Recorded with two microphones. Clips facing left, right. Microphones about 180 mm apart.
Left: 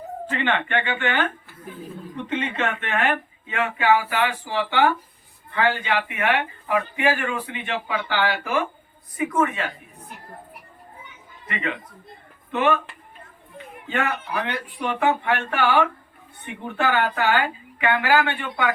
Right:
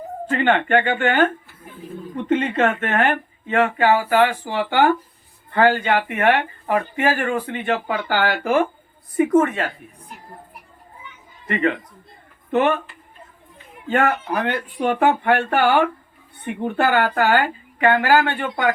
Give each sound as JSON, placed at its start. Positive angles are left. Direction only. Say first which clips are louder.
{"t": 0.3, "sound": "speech", "louder": "right 7 dB", "side_deg": -45}
{"t": 11.4, "sound": "speech", "louder": "right 8 dB", "side_deg": -45}
{"t": 13.8, "sound": "speech", "louder": "right 6 dB", "side_deg": -45}